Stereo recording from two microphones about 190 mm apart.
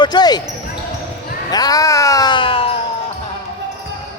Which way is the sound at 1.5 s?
20° left (ahead or behind).